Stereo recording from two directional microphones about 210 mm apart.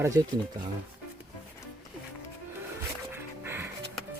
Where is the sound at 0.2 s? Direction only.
15° right (ahead or behind).